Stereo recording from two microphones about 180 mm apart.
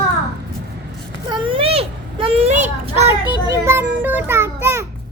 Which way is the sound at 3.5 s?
15° right (ahead or behind).